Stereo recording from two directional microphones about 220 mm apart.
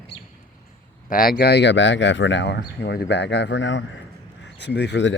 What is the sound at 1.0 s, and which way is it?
Speech, 40° left (ahead or behind).